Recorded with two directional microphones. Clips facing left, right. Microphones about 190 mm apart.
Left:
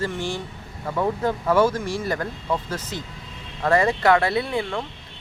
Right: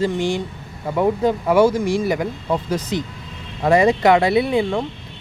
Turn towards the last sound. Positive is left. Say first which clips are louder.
# right 7 dB
turn(degrees=-15)  # may be behind; listen again after turning